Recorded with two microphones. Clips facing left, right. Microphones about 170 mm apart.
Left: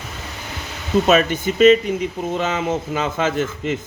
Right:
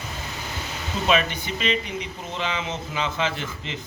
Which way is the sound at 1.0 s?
45° left (ahead or behind).